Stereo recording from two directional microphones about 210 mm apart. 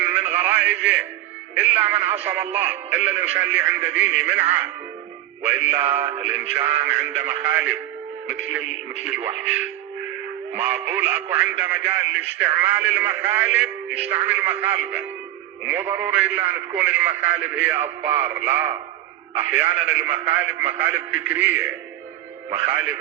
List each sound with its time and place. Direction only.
0.0 s a sound: 10° right (ahead or behind)
0.8 s speech: 5° right (ahead or behind)
5.5 s speech: 5° right (ahead or behind)
9.4 s speech: 5° right (ahead or behind)
22.7 s speech: 5° right (ahead or behind)